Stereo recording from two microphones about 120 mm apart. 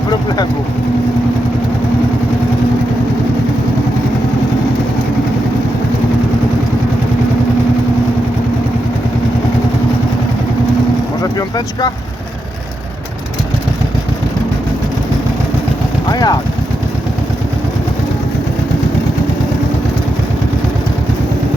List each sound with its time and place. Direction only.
11.2 s vehicle: 35° left (ahead or behind)
16.1 s speech: 35° left (ahead or behind)